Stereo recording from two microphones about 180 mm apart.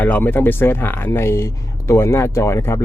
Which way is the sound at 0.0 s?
10° left (ahead or behind).